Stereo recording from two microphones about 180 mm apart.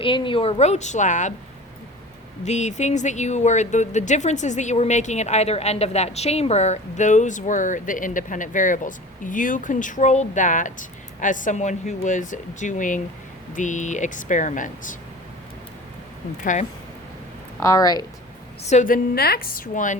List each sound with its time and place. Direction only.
0.0 s speech: 30° left (ahead or behind)
2.4 s speech: 40° left (ahead or behind)
16.4 s speech: 45° left (ahead or behind)
17.6 s speech: 20° left (ahead or behind)
18.6 s speech: 40° left (ahead or behind)